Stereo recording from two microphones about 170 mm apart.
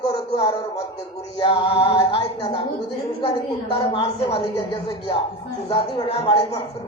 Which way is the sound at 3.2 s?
30° left (ahead or behind).